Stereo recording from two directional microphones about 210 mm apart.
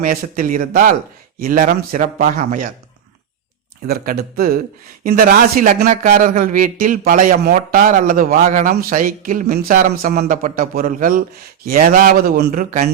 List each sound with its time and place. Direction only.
0.0 s speech: 40° right (ahead or behind)
3.8 s speech: 45° right (ahead or behind)